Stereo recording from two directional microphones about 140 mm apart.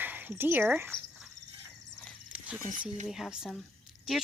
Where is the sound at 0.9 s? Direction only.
35° left (ahead or behind).